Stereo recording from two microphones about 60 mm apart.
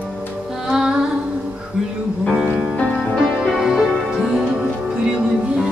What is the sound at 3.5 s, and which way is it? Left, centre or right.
Music, centre.